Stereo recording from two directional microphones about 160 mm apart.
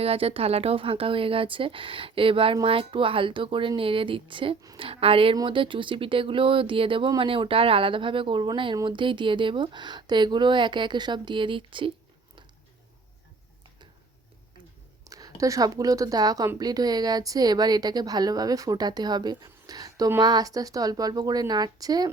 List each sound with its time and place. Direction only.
0.0 s speech: 40° right (ahead or behind)
15.0 s a woman's voice: 20° right (ahead or behind)